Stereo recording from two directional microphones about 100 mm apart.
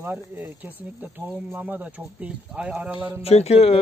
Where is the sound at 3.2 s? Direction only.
90° left.